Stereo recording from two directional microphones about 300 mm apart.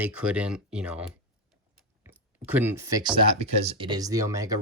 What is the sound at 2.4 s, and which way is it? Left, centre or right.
Speech, centre.